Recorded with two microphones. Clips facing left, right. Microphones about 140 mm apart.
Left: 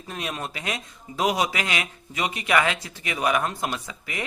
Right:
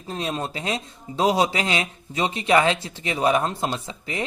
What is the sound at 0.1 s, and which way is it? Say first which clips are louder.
A man's voice: right 4 dB; 30° right (ahead or behind).